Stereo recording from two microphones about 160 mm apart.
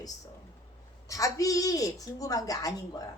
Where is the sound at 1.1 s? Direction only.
20° left (ahead or behind).